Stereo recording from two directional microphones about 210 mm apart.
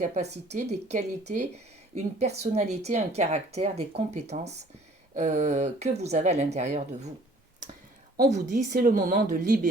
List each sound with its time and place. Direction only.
0.0 s speech: 30° right (ahead or behind)
8.1 s speech: 45° right (ahead or behind)